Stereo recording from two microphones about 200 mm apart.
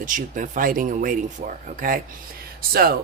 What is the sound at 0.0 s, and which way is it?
Speech, 40° right (ahead or behind).